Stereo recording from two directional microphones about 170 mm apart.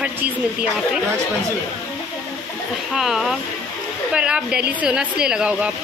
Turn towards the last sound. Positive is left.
turn(degrees=-5)  # may be behind; listen again after turning